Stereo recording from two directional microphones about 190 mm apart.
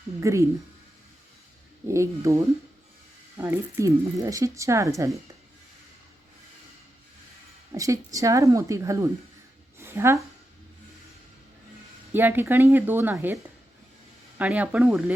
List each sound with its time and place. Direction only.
0.2 s speech: 15° right (ahead or behind)
1.9 s speech: 15° right (ahead or behind)
7.7 s a woman's voice: 15° right (ahead or behind)
12.1 s speech: 10° right (ahead or behind)